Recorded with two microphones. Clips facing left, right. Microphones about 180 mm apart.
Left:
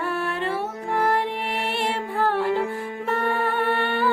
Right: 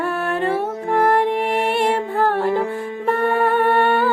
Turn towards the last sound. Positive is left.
turn(degrees=-45)  # may be behind; listen again after turning